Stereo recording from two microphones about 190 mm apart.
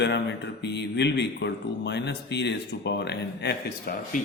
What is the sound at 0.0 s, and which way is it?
Speech, 65° left (ahead or behind).